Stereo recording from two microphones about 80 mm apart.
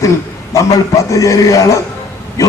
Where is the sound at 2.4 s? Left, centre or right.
Left.